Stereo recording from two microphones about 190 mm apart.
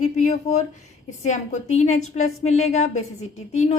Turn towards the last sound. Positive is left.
turn(degrees=35)  # may be behind; listen again after turning